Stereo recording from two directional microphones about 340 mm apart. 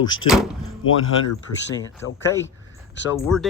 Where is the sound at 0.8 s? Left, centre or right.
Left.